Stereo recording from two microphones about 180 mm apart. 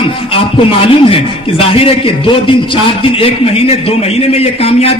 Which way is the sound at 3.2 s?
35° left (ahead or behind).